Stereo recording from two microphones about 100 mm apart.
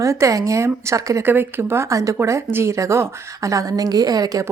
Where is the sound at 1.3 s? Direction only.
20° right (ahead or behind).